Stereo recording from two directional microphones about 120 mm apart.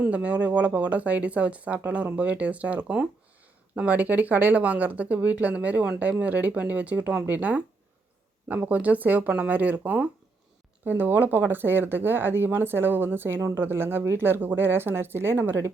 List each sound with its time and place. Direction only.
0.0 s speech: 10° right (ahead or behind)